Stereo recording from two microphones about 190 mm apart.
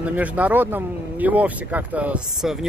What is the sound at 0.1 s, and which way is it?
Speech, 10° right (ahead or behind).